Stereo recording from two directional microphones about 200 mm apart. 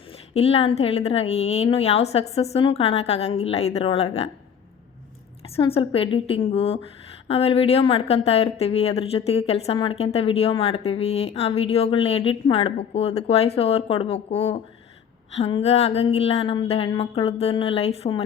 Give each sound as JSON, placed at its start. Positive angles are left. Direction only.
{"t": 0.3, "sound": "speech", "side_deg": 30}
{"t": 5.5, "sound": "a woman's voice", "side_deg": 30}